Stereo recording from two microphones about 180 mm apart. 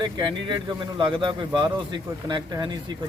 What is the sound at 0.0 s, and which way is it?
Speech, 25° right (ahead or behind).